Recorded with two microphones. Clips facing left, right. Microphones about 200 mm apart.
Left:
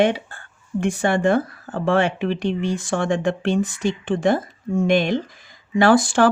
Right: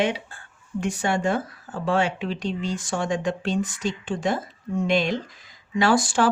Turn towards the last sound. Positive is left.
turn(degrees=55)  # may be behind; listen again after turning